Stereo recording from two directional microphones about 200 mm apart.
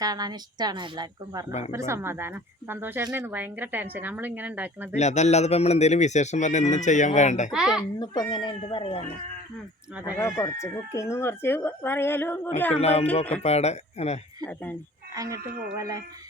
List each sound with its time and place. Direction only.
0.0 s a woman's voice: 20° right (ahead or behind)
4.9 s speech: 35° left (ahead or behind)
7.5 s a child's voice: 5° right (ahead or behind)
7.9 s speech: 20° left (ahead or behind)
10.2 s speech: 15° left (ahead or behind)
12.7 s speech: 30° left (ahead or behind)
14.4 s speech: 10° left (ahead or behind)
15.1 s speech: 15° right (ahead or behind)